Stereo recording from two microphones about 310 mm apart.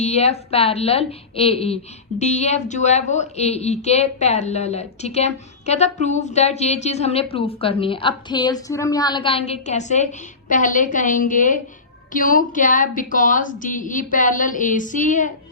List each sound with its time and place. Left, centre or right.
0.0 s a woman's voice: left